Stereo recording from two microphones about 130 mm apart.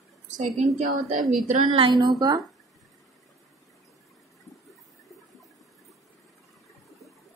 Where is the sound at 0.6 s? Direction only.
65° right (ahead or behind); by 1.3 s 90° right.